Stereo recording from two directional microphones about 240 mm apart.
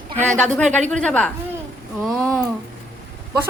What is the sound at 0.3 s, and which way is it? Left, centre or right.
A woman's voice, centre.